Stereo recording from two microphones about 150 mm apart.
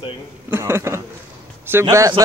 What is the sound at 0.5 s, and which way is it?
Speech, 15° right (ahead or behind).